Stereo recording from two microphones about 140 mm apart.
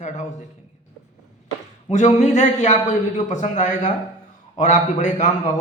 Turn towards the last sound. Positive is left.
turn(degrees=60)  # may be behind; listen again after turning